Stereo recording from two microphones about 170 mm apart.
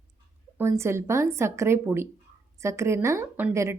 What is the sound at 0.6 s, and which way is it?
A woman's voice, 15° right (ahead or behind).